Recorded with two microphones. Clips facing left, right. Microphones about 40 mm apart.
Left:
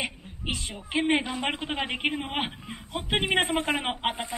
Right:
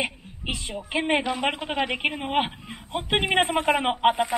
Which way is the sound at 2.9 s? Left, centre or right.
Right.